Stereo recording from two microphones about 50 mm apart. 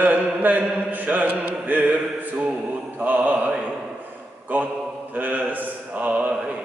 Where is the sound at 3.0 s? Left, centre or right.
Right.